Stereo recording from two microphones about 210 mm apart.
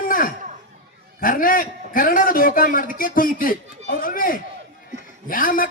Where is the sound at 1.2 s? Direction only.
40° left (ahead or behind).